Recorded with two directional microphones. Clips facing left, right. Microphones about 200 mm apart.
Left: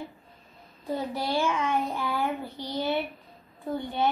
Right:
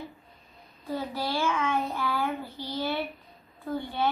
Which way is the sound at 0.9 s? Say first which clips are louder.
Left 2 dB; 20° left (ahead or behind).